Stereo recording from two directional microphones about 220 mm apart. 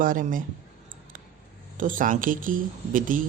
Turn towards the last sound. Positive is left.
turn(degrees=-40)  # may be behind; listen again after turning